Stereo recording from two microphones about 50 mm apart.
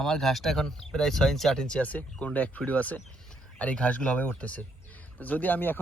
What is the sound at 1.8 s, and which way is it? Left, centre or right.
Speech, left.